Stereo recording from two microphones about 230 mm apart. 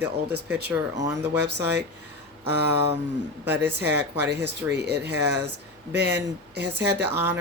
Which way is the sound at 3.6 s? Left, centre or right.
Right.